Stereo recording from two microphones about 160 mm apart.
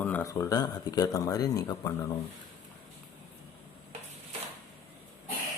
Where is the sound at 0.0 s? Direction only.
15° left (ahead or behind).